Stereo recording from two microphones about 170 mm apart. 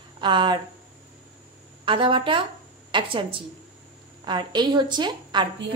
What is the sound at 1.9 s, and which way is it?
A woman's voice, 30° right (ahead or behind).